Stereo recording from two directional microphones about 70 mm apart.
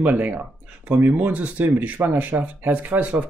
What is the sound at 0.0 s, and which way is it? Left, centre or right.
Speech, right.